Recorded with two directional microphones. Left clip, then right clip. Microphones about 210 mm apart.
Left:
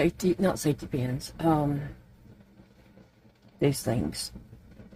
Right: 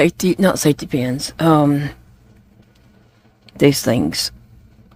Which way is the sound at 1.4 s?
60° right (ahead or behind).